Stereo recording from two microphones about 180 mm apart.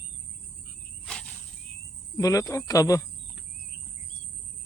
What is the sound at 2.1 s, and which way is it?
Speech, 20° left (ahead or behind).